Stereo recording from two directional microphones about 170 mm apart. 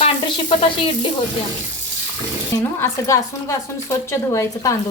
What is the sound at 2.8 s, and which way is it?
A woman's voice, 20° left (ahead or behind).